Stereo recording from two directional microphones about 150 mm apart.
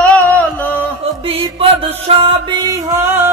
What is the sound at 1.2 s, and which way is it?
Music, 35° right (ahead or behind).